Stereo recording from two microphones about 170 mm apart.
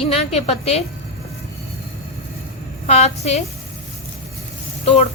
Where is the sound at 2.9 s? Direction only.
40° left (ahead or behind).